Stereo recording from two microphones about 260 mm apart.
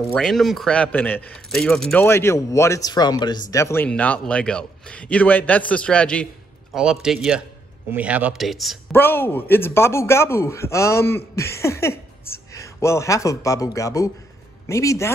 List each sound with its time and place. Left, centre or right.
0.1 s speech: centre